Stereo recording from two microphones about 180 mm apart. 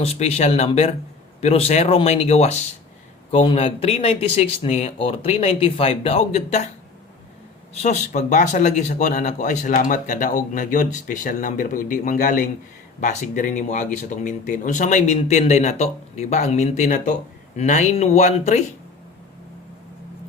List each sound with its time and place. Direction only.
0.0 s speech: 35° left (ahead or behind)
7.7 s speech: 40° left (ahead or behind)